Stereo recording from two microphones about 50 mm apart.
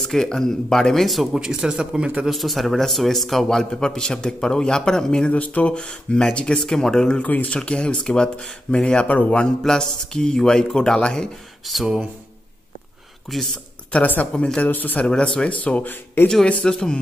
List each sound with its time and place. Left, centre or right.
0.0 s a man's voice: centre
1.4 s speech: centre
2.2 s a man's voice: centre
5.3 s a man's voice: left
7.2 s speech: left
7.5 s speech: left
9.6 s a man's voice: centre
11.6 s speech: centre
13.3 s speech: centre
13.9 s speech: left
15.0 s speech: centre; by 16.3 s left
16.6 s a man's voice: centre